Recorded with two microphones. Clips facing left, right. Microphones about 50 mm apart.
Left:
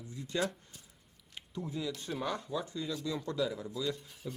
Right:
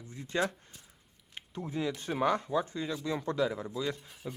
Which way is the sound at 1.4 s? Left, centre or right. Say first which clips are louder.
Right 3 dB; right.